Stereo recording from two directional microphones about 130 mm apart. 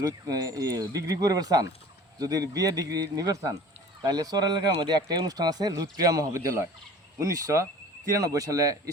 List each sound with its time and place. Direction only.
0.0 s speech: 25° right (ahead or behind)